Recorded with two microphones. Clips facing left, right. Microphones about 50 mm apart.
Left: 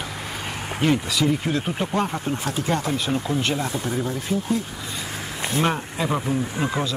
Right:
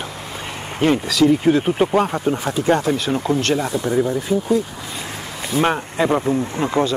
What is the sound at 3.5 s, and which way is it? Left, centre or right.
Speech, centre.